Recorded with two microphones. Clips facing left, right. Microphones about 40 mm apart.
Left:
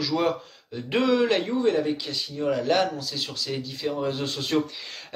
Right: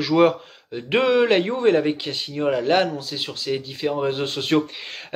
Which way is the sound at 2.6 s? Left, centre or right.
Right.